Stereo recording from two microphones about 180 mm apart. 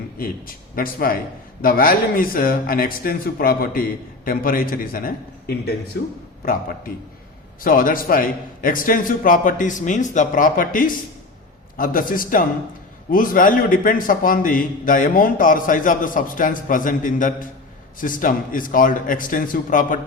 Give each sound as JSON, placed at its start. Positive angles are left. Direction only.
{"t": 0.2, "sound": "a man's voice", "side_deg": 55}
{"t": 6.4, "sound": "a man's voice", "side_deg": 55}